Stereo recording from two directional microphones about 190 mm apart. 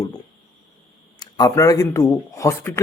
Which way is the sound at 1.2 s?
20° left (ahead or behind).